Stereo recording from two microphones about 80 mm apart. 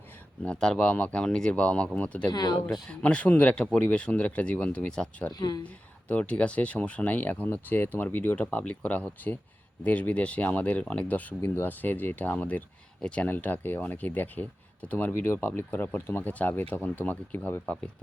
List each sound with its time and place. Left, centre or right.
0.4 s speech: centre
2.3 s speech: left
2.8 s speech: centre
5.3 s speech: left
5.6 s speech: centre